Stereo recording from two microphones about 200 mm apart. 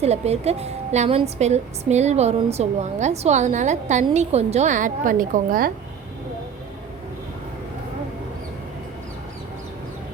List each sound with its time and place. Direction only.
0.0 s a woman's voice: 30° right (ahead or behind)